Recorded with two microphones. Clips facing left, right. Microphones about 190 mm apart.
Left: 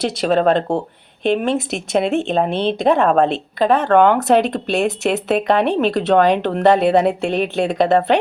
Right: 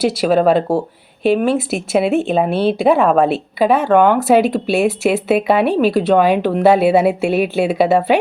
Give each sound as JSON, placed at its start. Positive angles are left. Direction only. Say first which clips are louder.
{"t": 0.0, "sound": "speech", "louder": "right 3 dB", "side_deg": -5}